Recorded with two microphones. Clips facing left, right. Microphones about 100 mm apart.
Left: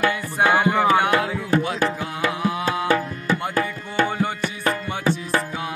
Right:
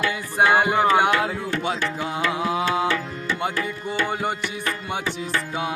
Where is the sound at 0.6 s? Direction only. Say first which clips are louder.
Even; 20° right (ahead or behind).